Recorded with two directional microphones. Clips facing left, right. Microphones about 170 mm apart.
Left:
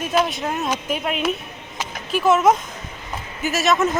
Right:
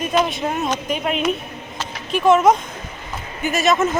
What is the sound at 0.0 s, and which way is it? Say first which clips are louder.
Speech: right 1 dB; 5° left (ahead or behind).